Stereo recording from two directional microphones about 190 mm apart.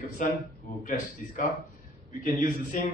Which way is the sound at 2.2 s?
45° left (ahead or behind).